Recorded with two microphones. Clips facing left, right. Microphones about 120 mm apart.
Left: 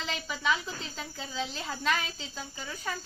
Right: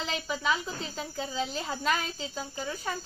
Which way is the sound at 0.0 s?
Centre (ahead or behind).